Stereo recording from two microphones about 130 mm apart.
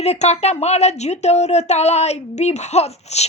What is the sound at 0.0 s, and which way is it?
Speech, 55° left (ahead or behind).